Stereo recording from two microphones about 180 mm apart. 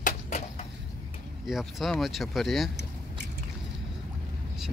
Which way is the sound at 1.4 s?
Centre (ahead or behind).